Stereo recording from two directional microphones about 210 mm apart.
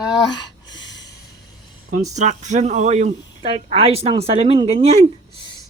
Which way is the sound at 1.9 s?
35° right (ahead or behind).